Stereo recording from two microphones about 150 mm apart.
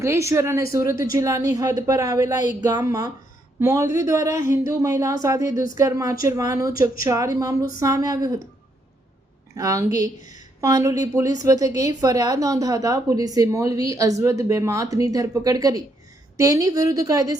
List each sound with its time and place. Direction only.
0.0 s a woman's voice: 20° right (ahead or behind)
9.6 s a woman's voice: 25° right (ahead or behind)